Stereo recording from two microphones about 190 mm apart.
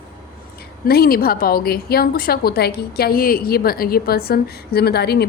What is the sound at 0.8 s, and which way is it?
A woman's voice, 55° left (ahead or behind).